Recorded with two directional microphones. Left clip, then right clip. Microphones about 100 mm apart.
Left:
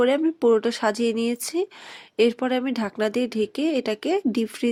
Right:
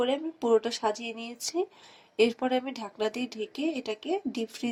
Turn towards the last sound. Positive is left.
turn(degrees=45)  # may be behind; listen again after turning